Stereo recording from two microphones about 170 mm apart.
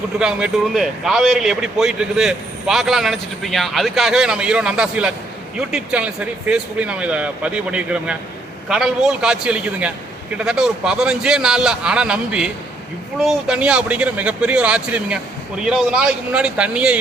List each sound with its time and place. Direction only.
0.2 s a man's voice: 5° right (ahead or behind)